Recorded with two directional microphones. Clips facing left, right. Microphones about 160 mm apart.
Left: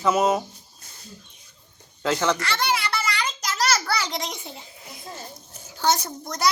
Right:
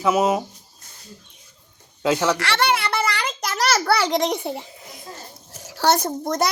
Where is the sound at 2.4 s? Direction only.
70° right (ahead or behind).